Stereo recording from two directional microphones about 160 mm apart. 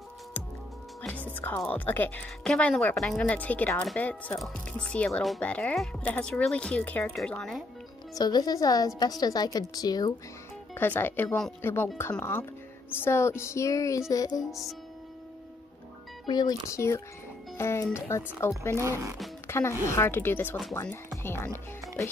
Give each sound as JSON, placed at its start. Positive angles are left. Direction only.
{"t": 1.0, "sound": "music", "side_deg": 10}
{"t": 1.6, "sound": "speech", "side_deg": 10}
{"t": 8.1, "sound": "a woman's voice", "side_deg": 25}
{"t": 10.7, "sound": "speech", "side_deg": 15}
{"t": 11.6, "sound": "a woman's voice", "side_deg": 15}
{"t": 14.4, "sound": "speech", "side_deg": 0}
{"t": 16.3, "sound": "a woman's voice", "side_deg": 25}
{"t": 18.8, "sound": "speech", "side_deg": -15}
{"t": 19.4, "sound": "speech", "side_deg": 15}